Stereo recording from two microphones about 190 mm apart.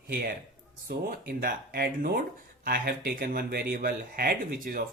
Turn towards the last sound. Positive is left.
turn(degrees=-50)  # may be behind; listen again after turning